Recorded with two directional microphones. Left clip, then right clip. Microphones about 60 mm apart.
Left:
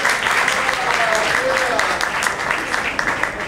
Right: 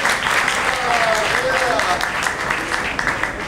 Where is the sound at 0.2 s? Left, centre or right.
Centre.